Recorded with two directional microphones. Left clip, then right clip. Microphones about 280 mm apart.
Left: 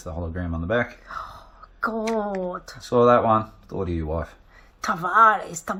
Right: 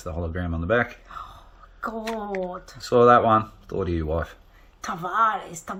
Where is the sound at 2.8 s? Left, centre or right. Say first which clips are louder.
Right 1 dB; centre.